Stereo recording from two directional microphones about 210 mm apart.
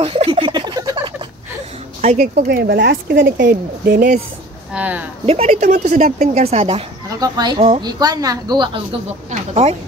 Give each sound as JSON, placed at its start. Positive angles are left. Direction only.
{"t": 0.0, "sound": "a sound", "side_deg": -25}
{"t": 2.0, "sound": "speech", "side_deg": -35}
{"t": 4.7, "sound": "speech", "side_deg": -5}
{"t": 5.2, "sound": "speech", "side_deg": -30}
{"t": 7.1, "sound": "speech", "side_deg": -20}
{"t": 9.3, "sound": "a sound", "side_deg": -30}